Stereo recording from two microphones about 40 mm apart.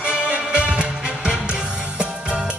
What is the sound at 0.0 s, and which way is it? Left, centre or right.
Music, right.